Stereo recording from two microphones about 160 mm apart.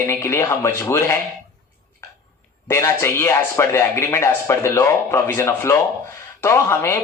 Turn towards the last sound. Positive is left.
turn(degrees=15)  # may be behind; listen again after turning